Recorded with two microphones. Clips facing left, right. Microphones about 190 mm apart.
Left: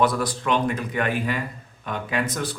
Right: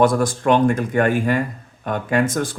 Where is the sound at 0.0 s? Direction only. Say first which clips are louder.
Right 6 dB; 45° right (ahead or behind).